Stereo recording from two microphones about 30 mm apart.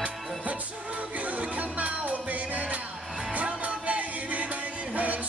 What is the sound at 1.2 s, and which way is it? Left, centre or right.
Music, right.